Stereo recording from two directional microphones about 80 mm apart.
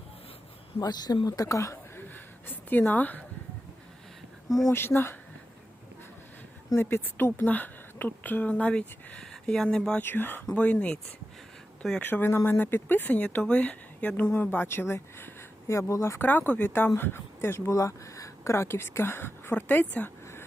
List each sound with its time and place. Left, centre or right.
0.8 s speech: left
2.0 s a sound: left
4.4 s speech: centre
4.7 s speech: left
6.7 s a woman's voice: left; by 10.0 s centre
10.0 s a woman's voice: left; by 12.0 s centre
12.0 s a woman's voice: left
16.2 s a woman's voice: left
17.7 s speech: left